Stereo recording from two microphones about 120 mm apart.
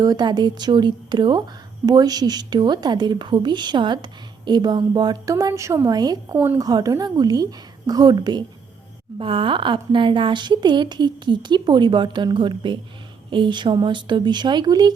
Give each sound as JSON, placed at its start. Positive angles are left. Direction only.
{"t": 0.0, "sound": "a woman's voice", "side_deg": -35}
{"t": 6.3, "sound": "speech", "side_deg": -20}
{"t": 6.6, "sound": "a woman's voice", "side_deg": -30}
{"t": 9.1, "sound": "a woman's voice", "side_deg": -50}